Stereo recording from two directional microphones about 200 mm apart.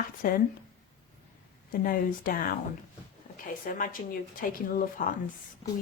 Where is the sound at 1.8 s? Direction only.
45° left (ahead or behind).